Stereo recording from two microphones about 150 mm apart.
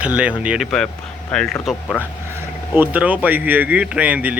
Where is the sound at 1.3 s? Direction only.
5° left (ahead or behind).